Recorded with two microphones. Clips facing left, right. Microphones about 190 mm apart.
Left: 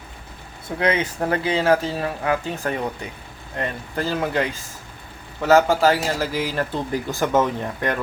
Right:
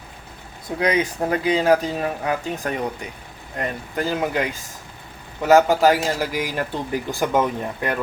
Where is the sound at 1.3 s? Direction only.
15° right (ahead or behind).